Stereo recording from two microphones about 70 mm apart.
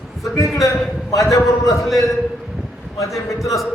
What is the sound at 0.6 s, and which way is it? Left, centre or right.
A man's voice, left.